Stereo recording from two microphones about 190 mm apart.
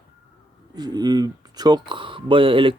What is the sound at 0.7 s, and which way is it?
Speech, 20° right (ahead or behind).